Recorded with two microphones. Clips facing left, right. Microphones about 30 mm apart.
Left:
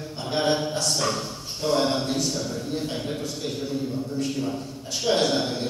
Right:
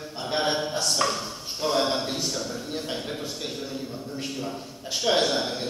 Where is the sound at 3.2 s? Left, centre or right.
Right.